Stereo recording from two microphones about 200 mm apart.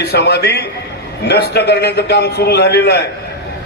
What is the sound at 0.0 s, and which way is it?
A man's voice, 55° left (ahead or behind).